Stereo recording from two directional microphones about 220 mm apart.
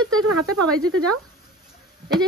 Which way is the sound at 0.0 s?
80° right.